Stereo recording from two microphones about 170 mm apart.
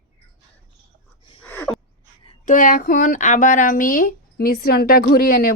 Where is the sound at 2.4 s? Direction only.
50° left (ahead or behind).